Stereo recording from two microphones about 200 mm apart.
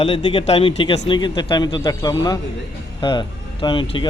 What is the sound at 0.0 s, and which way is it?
Speech, 25° left (ahead or behind).